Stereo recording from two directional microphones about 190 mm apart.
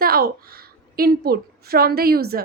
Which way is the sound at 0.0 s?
55° right (ahead or behind).